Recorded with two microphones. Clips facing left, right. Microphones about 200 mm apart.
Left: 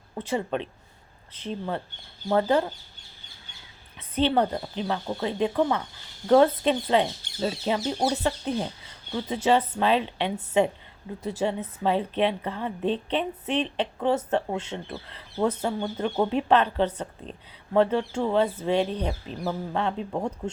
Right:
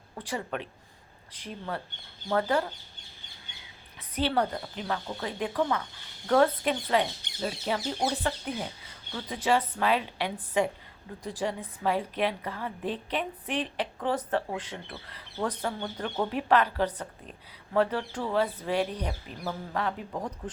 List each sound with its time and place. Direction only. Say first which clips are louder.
0.1 s a woman's voice: left 6 dB; 25° left (ahead or behind)
4.1 s a woman's voice: left 5 dB; 25° left (ahead or behind)